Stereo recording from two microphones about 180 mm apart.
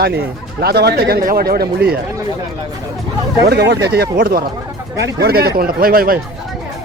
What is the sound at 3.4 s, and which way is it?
Speech, 65° right (ahead or behind).